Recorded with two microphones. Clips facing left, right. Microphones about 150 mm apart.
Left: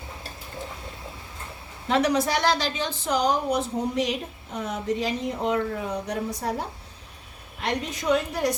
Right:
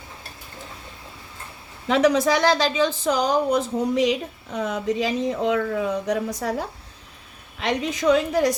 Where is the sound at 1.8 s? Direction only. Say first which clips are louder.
Right 4 dB; 90° right.